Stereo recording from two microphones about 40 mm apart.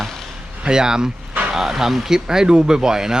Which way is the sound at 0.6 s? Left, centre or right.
Centre.